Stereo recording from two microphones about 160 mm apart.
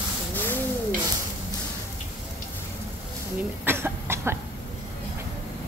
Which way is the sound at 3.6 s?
15° right (ahead or behind).